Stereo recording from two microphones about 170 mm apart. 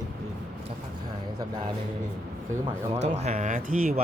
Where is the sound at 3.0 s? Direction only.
40° right (ahead or behind).